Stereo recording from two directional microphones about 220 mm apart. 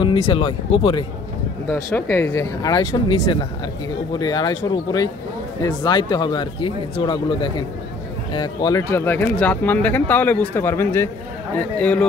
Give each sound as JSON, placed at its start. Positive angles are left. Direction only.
{"t": 0.3, "sound": "speech", "side_deg": 25}
{"t": 1.7, "sound": "speech", "side_deg": 10}